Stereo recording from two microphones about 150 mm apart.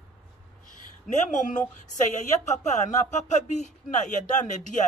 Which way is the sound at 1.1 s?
55° left (ahead or behind).